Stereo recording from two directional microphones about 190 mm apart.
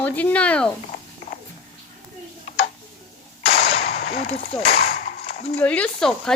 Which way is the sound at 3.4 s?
30° left (ahead or behind).